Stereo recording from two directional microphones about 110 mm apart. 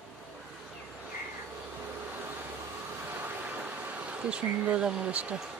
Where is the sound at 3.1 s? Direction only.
20° right (ahead or behind).